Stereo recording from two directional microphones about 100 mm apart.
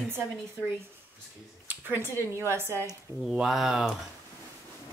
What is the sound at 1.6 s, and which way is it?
A woman's voice, 20° right (ahead or behind).